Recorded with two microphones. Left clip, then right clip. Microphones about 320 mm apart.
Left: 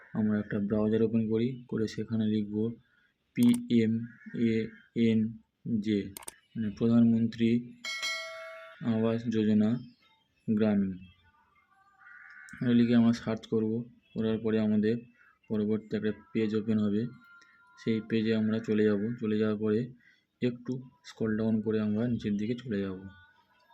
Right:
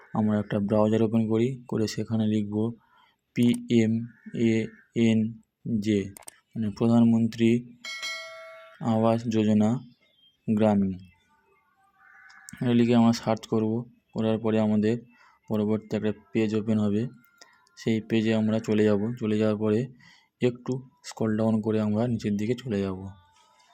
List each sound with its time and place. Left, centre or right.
0.1 s speech: centre
12.5 s speech: centre